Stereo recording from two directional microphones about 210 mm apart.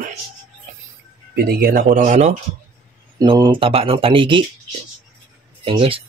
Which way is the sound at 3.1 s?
20° right (ahead or behind).